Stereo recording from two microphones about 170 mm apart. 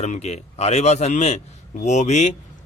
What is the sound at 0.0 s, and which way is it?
Speech, 40° left (ahead or behind).